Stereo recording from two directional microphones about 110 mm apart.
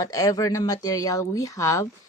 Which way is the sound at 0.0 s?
30° left (ahead or behind).